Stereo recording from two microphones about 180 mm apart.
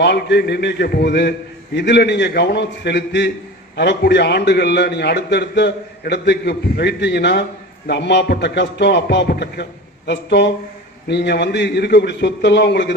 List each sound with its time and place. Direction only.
0.0 s a man's voice: 70° left (ahead or behind)